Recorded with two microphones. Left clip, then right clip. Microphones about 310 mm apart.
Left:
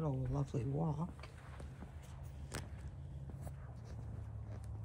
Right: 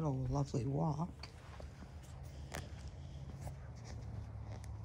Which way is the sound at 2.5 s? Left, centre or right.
Left.